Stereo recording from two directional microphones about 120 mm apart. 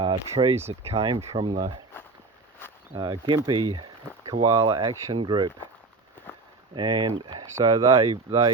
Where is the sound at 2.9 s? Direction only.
40° right (ahead or behind).